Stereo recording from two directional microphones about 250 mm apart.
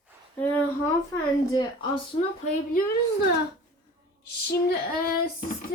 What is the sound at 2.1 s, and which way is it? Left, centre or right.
Speech, centre.